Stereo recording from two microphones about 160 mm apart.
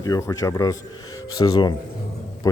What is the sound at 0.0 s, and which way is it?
Speech, 20° left (ahead or behind).